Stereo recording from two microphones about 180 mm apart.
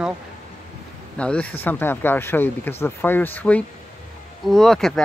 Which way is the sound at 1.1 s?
5° left (ahead or behind).